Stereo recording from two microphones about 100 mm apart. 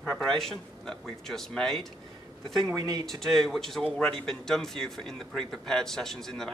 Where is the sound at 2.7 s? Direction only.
35° right (ahead or behind).